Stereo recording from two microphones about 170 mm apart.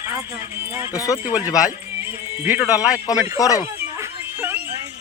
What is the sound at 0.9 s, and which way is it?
Speech, 20° left (ahead or behind).